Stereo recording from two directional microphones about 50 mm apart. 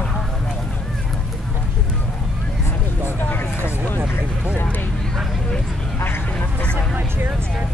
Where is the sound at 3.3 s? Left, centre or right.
Left.